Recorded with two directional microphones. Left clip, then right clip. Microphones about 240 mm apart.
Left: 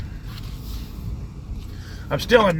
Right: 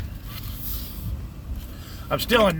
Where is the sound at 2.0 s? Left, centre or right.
Centre.